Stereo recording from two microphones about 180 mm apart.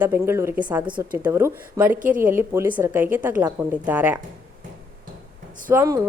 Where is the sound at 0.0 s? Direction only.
10° right (ahead or behind).